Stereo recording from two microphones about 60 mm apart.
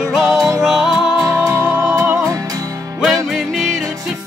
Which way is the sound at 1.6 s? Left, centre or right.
Right.